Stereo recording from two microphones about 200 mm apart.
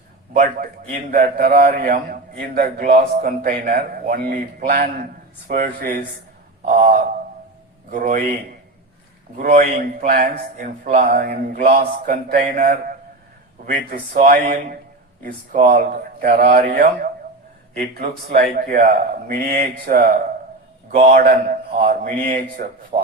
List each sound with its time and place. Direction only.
1.1 s a man's voice: 45° right (ahead or behind)
6.7 s a sound: 40° right (ahead or behind)
7.9 s speech: 40° right (ahead or behind)
9.4 s a man's voice: 40° right (ahead or behind)
20.9 s speech: 40° right (ahead or behind)